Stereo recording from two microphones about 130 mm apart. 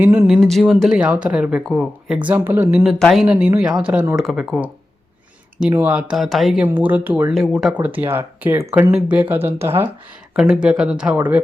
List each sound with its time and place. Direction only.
0.0 s speech: 15° right (ahead or behind)
0.3 s speech: 5° left (ahead or behind); by 2.8 s 15° right (ahead or behind)
2.8 s speech: centre (ahead or behind)
5.7 s speech: 10° right (ahead or behind)
6.7 s speech: 15° right (ahead or behind)
7.3 s speech: centre (ahead or behind); by 9.8 s 20° right (ahead or behind)
10.3 s speech: 5° right (ahead or behind)